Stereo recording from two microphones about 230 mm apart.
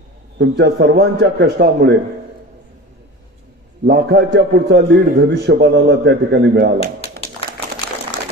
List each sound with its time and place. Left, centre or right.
0.4 s a man's voice: right
3.8 s a man's voice: right
7.0 s a sound: left